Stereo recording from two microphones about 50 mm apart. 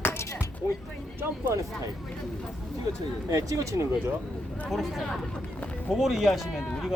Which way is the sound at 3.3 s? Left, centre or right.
Right.